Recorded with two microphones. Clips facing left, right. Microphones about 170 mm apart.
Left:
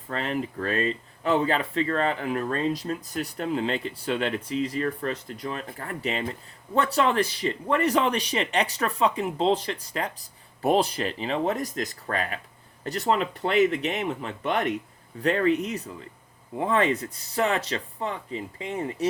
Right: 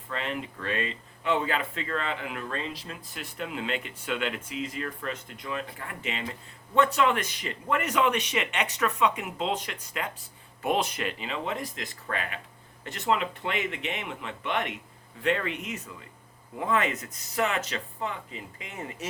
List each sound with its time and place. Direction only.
0.1 s speech: 40° left (ahead or behind)